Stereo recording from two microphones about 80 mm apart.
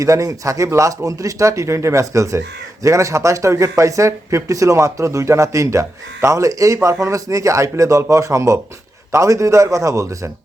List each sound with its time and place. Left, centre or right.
0.0 s speech: right